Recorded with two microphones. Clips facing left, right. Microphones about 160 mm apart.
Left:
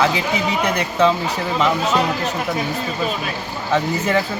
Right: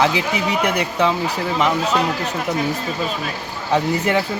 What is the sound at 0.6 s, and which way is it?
Speech, 10° right (ahead or behind).